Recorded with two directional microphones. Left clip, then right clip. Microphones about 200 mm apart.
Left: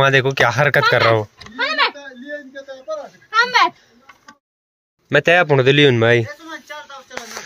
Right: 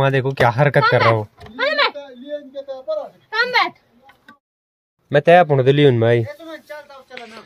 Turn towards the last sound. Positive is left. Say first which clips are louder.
# left 2 dB
turn(degrees=-10)  # may be behind; listen again after turning